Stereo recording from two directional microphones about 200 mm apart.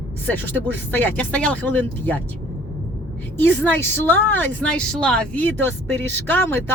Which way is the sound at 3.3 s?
10° left (ahead or behind).